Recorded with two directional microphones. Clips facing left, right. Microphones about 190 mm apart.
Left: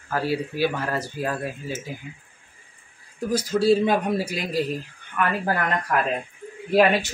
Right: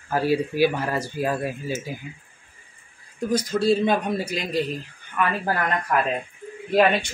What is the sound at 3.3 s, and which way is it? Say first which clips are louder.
Speech: left 1 dB; 5° left (ahead or behind).